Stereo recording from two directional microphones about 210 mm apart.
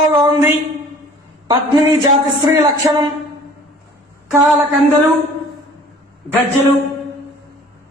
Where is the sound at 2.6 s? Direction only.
15° right (ahead or behind).